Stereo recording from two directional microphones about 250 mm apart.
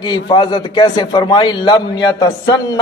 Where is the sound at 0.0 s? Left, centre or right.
Centre.